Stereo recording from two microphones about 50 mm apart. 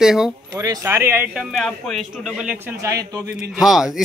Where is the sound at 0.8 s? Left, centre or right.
Right.